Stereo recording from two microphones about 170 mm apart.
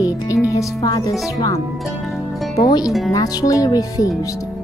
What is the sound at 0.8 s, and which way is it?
Speech, 20° left (ahead or behind).